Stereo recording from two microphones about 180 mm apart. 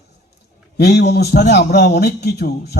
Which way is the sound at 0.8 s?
65° left (ahead or behind).